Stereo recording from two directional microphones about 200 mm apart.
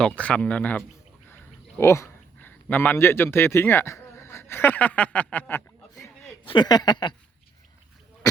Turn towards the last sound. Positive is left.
turn(degrees=20)  # may be behind; listen again after turning